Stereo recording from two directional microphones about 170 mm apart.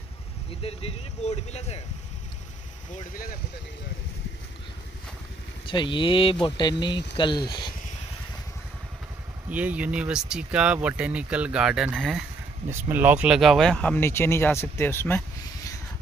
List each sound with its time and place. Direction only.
0.5 s speech: 35° left (ahead or behind)
3.1 s speech: 55° left (ahead or behind)
5.7 s speech: 30° left (ahead or behind)
9.5 s speech: 10° right (ahead or behind)
12.6 s speech: 15° right (ahead or behind); by 15.8 s 15° left (ahead or behind)